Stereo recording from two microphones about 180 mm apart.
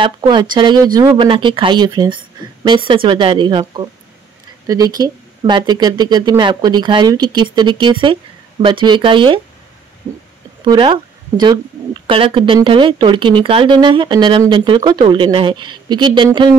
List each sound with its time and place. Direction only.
0.0 s speech: 25° right (ahead or behind)
10.6 s speech: 25° right (ahead or behind)